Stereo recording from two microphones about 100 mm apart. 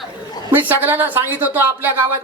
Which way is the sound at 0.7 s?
20° right (ahead or behind).